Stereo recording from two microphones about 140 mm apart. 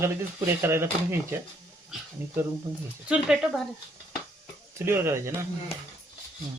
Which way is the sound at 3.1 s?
5° right (ahead or behind).